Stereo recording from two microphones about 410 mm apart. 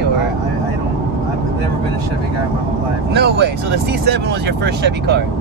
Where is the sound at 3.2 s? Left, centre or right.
Right.